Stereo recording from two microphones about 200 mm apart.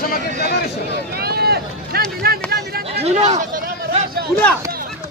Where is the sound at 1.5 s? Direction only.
50° right (ahead or behind).